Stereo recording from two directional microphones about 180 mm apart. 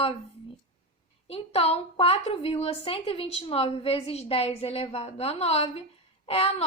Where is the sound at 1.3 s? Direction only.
35° left (ahead or behind).